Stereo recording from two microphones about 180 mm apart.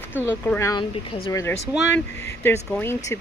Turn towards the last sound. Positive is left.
turn(degrees=15)  # may be behind; listen again after turning